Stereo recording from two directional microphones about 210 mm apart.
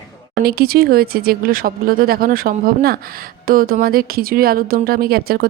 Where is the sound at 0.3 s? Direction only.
45° right (ahead or behind).